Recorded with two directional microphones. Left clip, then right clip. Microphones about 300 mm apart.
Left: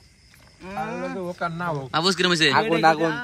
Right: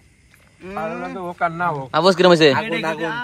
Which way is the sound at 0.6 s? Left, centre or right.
Left.